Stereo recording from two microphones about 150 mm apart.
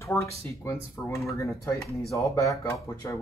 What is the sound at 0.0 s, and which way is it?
Speech, 20° left (ahead or behind).